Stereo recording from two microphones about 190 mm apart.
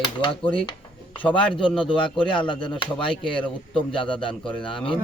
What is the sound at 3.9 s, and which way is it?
Speech, 25° left (ahead or behind).